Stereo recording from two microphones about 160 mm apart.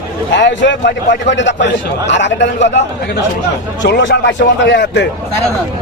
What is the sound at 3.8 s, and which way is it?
A man's voice, 90° left.